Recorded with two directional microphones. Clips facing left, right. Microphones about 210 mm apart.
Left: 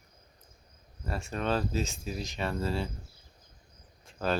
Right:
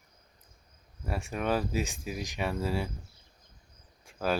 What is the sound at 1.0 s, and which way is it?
Speech, 15° right (ahead or behind).